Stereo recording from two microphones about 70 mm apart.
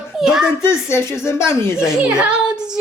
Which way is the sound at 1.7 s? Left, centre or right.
Centre.